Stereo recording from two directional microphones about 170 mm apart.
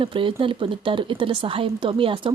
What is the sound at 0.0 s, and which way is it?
A woman's voice, 30° right (ahead or behind).